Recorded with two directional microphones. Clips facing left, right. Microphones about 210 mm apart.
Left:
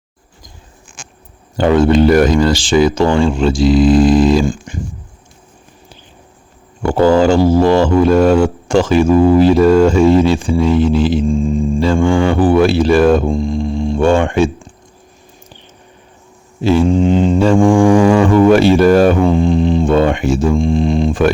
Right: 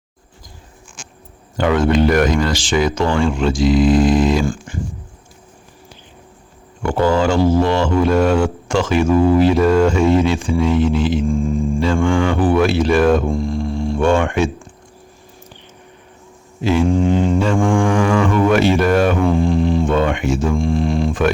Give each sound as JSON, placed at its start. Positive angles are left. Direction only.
{"t": 1.5, "sound": "speech", "side_deg": 30}
{"t": 4.4, "sound": "mantra", "side_deg": 15}
{"t": 6.8, "sound": "speech", "side_deg": 35}
{"t": 11.3, "sound": "mantra", "side_deg": 15}
{"t": 12.0, "sound": "speech", "side_deg": 35}
{"t": 13.2, "sound": "mantra", "side_deg": 20}
{"t": 14.0, "sound": "speech", "side_deg": 30}
{"t": 16.6, "sound": "mantra", "side_deg": 30}
{"t": 16.9, "sound": "music", "side_deg": 20}
{"t": 17.3, "sound": "speech", "side_deg": 35}
{"t": 19.2, "sound": "music", "side_deg": 20}
{"t": 20.5, "sound": "music", "side_deg": 20}